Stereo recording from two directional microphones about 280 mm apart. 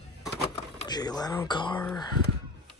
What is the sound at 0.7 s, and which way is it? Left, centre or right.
Speech, centre.